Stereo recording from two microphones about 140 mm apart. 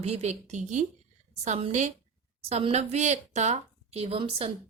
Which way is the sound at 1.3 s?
50° right (ahead or behind).